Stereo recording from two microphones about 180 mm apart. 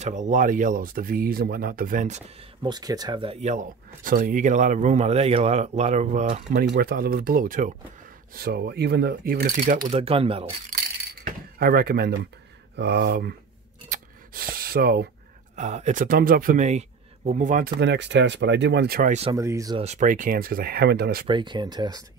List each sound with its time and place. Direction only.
0.0 s speech: 45° right (ahead or behind)
2.6 s speech: 20° right (ahead or behind); by 6.6 s 40° right (ahead or behind)
6.7 s speech: 55° right (ahead or behind)
8.3 s speech: 60° right (ahead or behind)
9.8 s speech: 35° right (ahead or behind)
11.2 s speech: 55° right (ahead or behind)
13.8 s a sound: 50° right (ahead or behind)
15.5 s speech: 40° right (ahead or behind)
17.7 s speech: 75° right (ahead or behind); by 19.1 s 60° right (ahead or behind)
19.3 s speech: 15° right (ahead or behind)
19.8 s speech: 40° right (ahead or behind); by 21.3 s 60° right (ahead or behind)
21.3 s speech: 25° right (ahead or behind)